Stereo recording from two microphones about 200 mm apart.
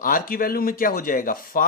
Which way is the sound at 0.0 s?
45° left (ahead or behind).